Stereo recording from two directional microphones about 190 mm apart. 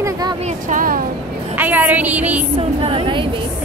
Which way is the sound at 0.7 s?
45° right (ahead or behind).